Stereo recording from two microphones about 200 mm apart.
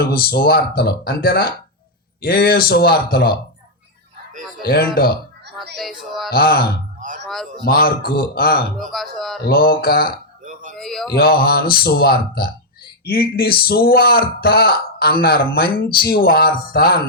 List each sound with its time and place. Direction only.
0.0 s speech: 50° left (ahead or behind)
4.6 s speech: 50° left (ahead or behind)
5.7 s speech: centre (ahead or behind)
6.3 s speech: 50° left (ahead or behind)
8.8 s speech: centre (ahead or behind)
9.5 s speech: 50° left (ahead or behind)
10.4 s a sound: 40° right (ahead or behind)
10.8 s speech: centre (ahead or behind)
11.1 s speech: 50° left (ahead or behind)